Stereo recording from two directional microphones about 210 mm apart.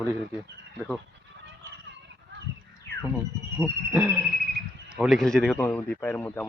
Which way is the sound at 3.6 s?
10° right (ahead or behind).